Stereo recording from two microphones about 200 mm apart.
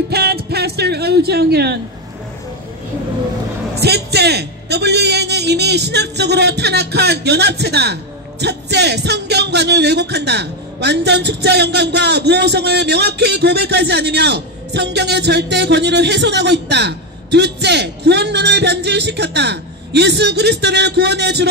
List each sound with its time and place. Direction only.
0.1 s music: 55° right (ahead or behind)
3.8 s a man's voice: 55° right (ahead or behind)